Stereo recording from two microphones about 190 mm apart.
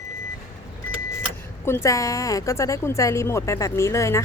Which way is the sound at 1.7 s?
15° left (ahead or behind).